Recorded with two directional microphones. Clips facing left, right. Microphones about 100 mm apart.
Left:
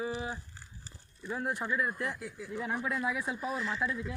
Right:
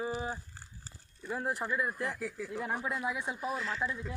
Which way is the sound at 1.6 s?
5° right (ahead or behind).